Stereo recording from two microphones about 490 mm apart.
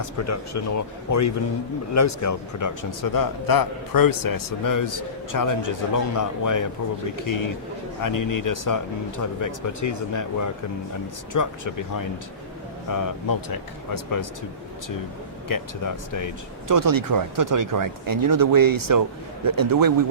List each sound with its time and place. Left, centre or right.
0.0 s speech: left
15.4 s speech: left
16.6 s speech: right